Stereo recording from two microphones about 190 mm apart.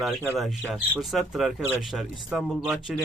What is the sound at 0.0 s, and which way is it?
Speech, centre (ahead or behind).